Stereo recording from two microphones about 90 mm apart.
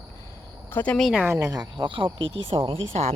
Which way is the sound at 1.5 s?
50° right (ahead or behind).